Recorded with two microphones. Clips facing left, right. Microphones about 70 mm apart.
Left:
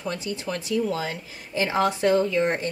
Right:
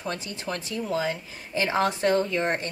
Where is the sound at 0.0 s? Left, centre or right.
Right.